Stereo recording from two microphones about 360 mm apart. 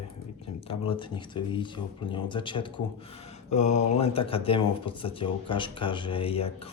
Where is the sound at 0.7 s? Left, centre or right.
Centre.